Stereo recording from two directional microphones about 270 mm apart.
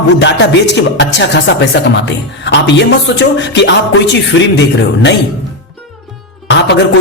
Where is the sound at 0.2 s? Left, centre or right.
Left.